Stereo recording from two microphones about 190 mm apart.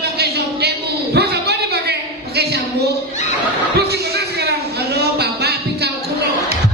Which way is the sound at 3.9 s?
60° right (ahead or behind).